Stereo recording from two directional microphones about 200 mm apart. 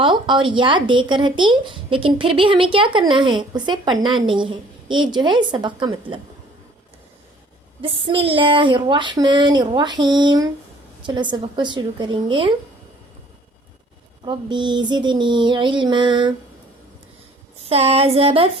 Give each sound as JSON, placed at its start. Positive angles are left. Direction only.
{"t": 0.0, "sound": "speech", "side_deg": -25}
{"t": 7.8, "sound": "speech", "side_deg": -25}
{"t": 14.3, "sound": "speech", "side_deg": -25}
{"t": 17.7, "sound": "speech", "side_deg": -30}